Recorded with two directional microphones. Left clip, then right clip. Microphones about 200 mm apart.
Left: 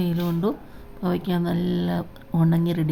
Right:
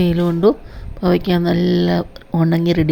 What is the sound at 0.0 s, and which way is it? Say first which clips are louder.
Speech: right 11 dB; 25° right (ahead or behind).